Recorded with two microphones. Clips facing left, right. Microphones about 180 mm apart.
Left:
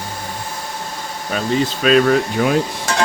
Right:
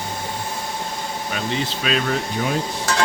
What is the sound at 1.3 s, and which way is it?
Speech, 45° left (ahead or behind).